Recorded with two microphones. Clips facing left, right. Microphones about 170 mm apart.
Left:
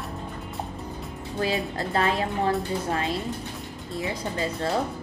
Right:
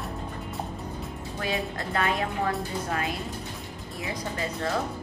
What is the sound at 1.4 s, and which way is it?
A woman's voice, 30° left (ahead or behind).